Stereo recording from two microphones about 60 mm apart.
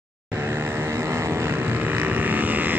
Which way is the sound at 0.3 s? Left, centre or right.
Right.